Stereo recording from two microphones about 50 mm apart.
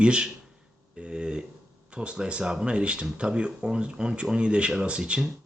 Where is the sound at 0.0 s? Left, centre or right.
Centre.